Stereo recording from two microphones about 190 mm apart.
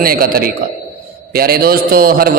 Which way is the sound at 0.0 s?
50° right (ahead or behind).